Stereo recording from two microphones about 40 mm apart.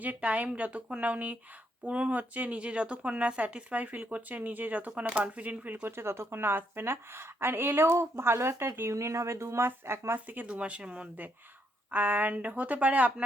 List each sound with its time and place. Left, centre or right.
0.0 s speech: right
6.0 s a woman's voice: right
10.4 s speech: right
11.9 s speech: right
12.3 s speech: right